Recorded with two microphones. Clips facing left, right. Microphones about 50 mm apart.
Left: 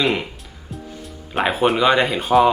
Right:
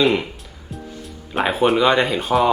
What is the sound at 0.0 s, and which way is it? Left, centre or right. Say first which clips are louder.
Speech: right 3 dB; centre.